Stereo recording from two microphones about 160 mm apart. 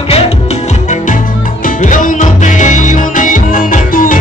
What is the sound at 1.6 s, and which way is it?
Music, 55° left (ahead or behind).